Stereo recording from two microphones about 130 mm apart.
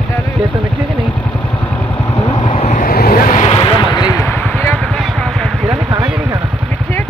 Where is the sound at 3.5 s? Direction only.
40° left (ahead or behind).